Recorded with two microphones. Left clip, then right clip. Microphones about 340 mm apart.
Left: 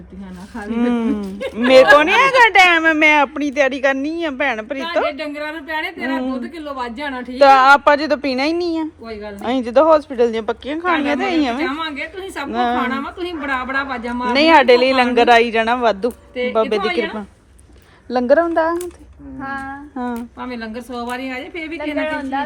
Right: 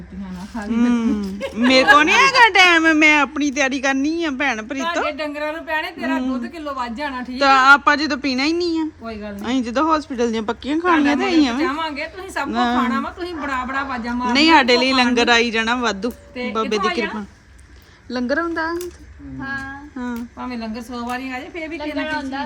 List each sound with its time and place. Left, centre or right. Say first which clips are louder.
0.7 s speech: left 1 dB; centre
19.4 s female singing: left 1 dB; centre
20.0 s speech: left 3 dB; centre